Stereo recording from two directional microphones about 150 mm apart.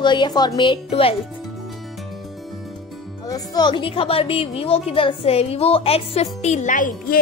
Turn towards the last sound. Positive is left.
turn(degrees=60)  # may be behind; listen again after turning